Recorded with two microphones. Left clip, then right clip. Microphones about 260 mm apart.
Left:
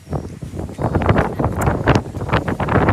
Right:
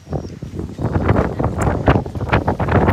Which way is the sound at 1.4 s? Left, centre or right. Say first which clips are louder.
Even; right.